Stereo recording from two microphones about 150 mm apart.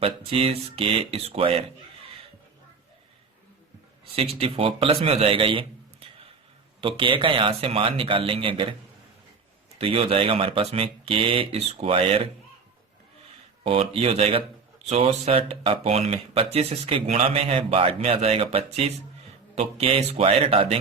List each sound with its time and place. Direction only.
0.0 s speech: 40° right (ahead or behind)
4.1 s speech: 40° right (ahead or behind)
6.8 s speech: 35° right (ahead or behind)
9.7 s speech: 40° right (ahead or behind)
13.7 s speech: 40° right (ahead or behind)